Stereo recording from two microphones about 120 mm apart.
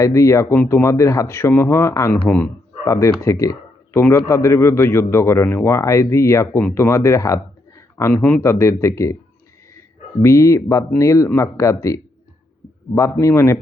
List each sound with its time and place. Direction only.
0.0 s a man's voice: 25° left (ahead or behind)
2.1 s speech: 15° left (ahead or behind)
2.8 s a man's voice: 25° left (ahead or behind)
6.6 s speech: 15° left (ahead or behind)
6.8 s a man's voice: 25° left (ahead or behind)
8.1 s speech: 10° left (ahead or behind)
8.4 s a man's voice: 25° left (ahead or behind)
10.2 s a man's voice: 25° left (ahead or behind)